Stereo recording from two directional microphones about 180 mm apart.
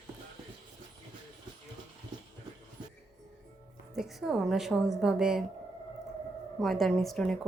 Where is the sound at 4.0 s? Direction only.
Centre (ahead or behind).